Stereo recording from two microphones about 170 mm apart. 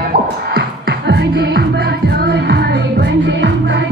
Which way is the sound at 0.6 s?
75° right (ahead or behind).